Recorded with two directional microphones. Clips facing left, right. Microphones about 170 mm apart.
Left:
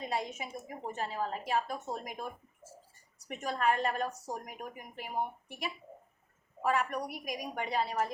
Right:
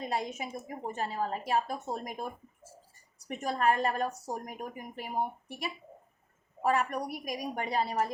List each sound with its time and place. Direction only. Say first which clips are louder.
0.0 s a woman's voice: right 2 dB; 45° right (ahead or behind)
3.2 s a woman's voice: right 3 dB; 40° right (ahead or behind)